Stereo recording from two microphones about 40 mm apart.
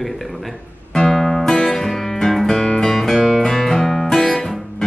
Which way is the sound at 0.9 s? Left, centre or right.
Centre.